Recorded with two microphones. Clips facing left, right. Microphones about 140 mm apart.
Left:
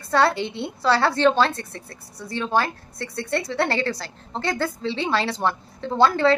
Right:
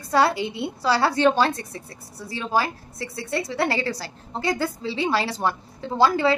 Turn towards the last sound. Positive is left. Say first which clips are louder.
# left 1 dB
turn(degrees=-5)  # may be behind; listen again after turning